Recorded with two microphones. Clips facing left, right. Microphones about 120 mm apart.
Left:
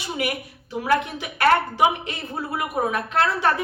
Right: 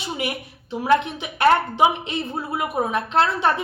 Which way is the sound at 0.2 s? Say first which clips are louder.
Left 1 dB; 25° right (ahead or behind).